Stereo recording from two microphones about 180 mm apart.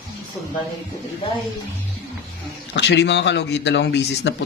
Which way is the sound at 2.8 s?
75° left (ahead or behind).